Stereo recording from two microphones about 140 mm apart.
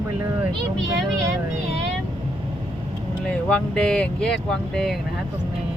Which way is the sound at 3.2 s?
5° left (ahead or behind).